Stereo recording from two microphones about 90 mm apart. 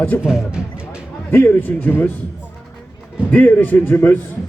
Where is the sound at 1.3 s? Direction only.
20° left (ahead or behind).